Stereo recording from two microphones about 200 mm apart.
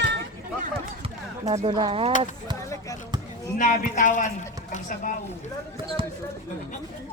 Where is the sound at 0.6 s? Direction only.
35° right (ahead or behind).